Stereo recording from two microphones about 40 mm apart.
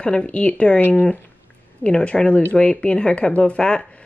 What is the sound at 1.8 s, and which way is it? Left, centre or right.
Speech, left.